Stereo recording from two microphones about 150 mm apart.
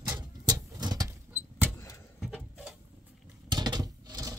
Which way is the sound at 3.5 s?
30° right (ahead or behind).